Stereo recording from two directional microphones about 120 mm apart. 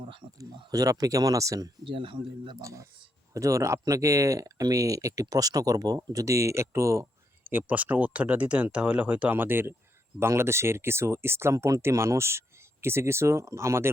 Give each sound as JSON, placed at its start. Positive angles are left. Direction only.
{"t": 0.3, "sound": "speech", "side_deg": -30}
{"t": 1.8, "sound": "speech", "side_deg": -45}
{"t": 2.6, "sound": "speech", "side_deg": -25}
{"t": 7.5, "sound": "speech", "side_deg": -15}